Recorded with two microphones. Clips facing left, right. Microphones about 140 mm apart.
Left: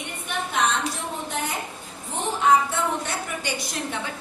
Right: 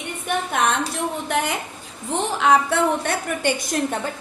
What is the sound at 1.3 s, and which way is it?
A woman's voice, 65° right (ahead or behind).